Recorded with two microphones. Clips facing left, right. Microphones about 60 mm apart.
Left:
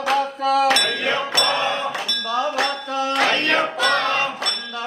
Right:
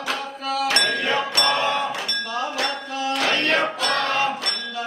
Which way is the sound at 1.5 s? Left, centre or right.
Left.